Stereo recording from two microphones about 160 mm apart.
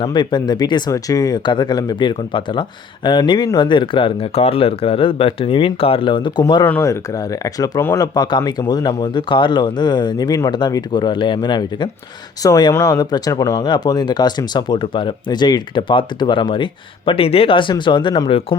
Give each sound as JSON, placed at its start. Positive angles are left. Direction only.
{"t": 0.0, "sound": "speech", "side_deg": 30}
{"t": 6.7, "sound": "speech", "side_deg": 15}